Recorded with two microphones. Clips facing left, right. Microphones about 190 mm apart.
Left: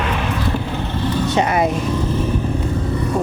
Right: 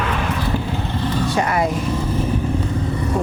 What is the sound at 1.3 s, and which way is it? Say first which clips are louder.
Speech: left 3 dB; 20° left (ahead or behind).